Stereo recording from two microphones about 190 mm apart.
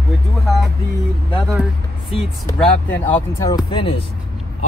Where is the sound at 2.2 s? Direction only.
5° left (ahead or behind).